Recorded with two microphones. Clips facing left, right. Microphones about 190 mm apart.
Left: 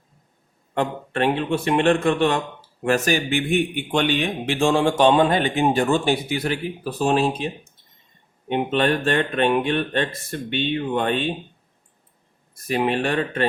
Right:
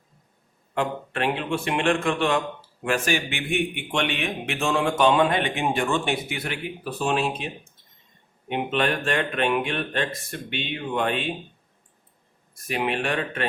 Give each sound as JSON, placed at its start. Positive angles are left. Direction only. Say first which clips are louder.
{"t": 0.7, "sound": "a man's voice", "louder": "left 3 dB", "side_deg": 35}
{"t": 12.6, "sound": "a man's voice", "louder": "left 4 dB", "side_deg": 35}